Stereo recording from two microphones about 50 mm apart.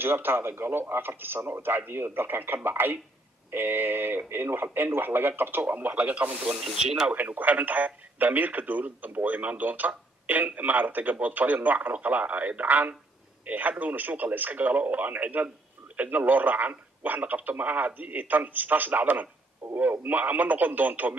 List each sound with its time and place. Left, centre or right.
0.0 s speech: right
6.8 s speech: centre
7.2 s speech: right